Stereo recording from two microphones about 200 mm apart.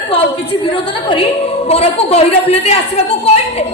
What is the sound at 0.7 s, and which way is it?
A woman's voice, 25° left (ahead or behind).